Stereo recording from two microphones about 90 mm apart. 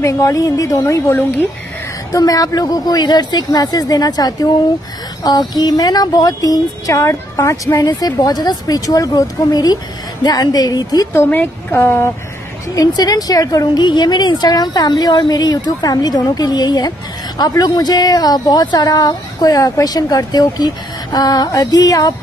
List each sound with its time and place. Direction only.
0.0 s speech: 40° left (ahead or behind)
2.1 s speech: 45° left (ahead or behind)
11.1 s a woman's voice: 20° left (ahead or behind)
12.7 s speech: 45° left (ahead or behind)